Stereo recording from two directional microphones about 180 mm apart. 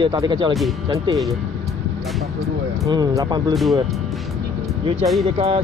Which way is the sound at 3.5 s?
Centre (ahead or behind).